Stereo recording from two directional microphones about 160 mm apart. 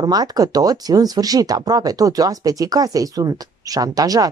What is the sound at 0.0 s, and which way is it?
A woman's voice, 25° right (ahead or behind).